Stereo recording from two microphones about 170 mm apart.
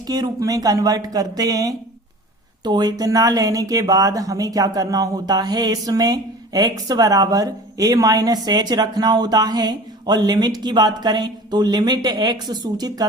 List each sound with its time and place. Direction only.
0.1 s speech: 20° right (ahead or behind)